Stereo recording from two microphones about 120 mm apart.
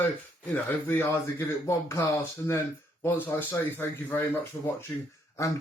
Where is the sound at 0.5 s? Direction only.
15° left (ahead or behind).